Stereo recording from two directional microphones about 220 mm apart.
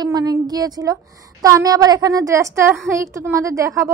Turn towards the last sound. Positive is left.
turn(degrees=-15)  # may be behind; listen again after turning